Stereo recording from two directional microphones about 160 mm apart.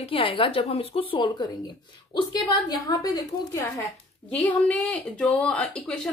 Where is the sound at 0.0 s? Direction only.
35° left (ahead or behind).